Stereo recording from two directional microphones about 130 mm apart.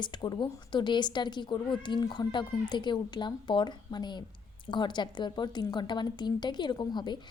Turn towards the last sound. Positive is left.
turn(degrees=35)  # may be behind; listen again after turning